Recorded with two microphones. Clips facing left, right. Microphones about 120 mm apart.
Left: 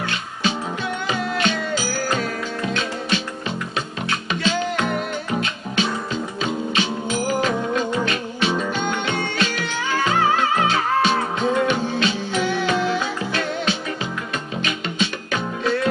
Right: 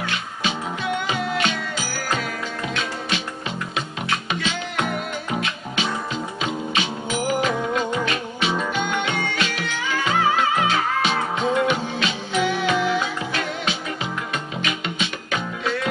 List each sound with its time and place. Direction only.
0.0 s music: 35° left (ahead or behind)
4.3 s music: 35° left (ahead or behind)